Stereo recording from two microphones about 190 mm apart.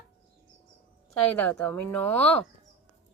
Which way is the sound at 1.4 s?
5° left (ahead or behind).